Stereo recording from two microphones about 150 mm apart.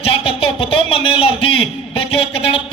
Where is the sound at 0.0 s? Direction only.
40° left (ahead or behind).